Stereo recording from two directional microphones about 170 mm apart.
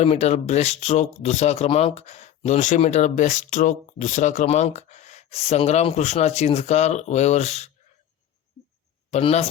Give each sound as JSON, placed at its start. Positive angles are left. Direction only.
{"t": 0.0, "sound": "speech", "side_deg": 40}
{"t": 9.0, "sound": "speech", "side_deg": 40}